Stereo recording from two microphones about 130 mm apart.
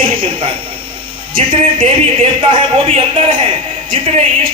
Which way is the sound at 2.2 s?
45° right (ahead or behind).